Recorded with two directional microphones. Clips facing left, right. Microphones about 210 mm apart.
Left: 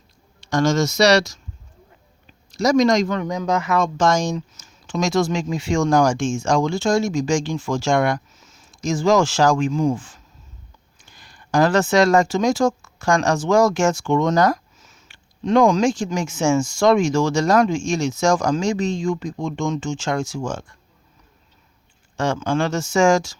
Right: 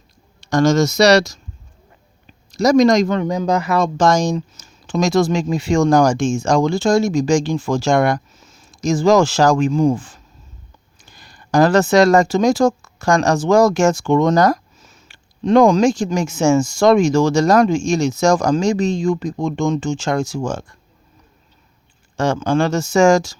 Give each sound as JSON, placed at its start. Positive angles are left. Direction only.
{"t": 0.4, "sound": "speech", "side_deg": -40}
{"t": 2.5, "sound": "speech", "side_deg": -40}
{"t": 22.1, "sound": "speech", "side_deg": -40}